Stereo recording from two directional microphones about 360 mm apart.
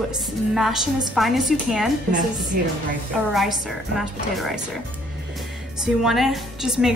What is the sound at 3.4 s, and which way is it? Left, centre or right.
A woman's voice, centre.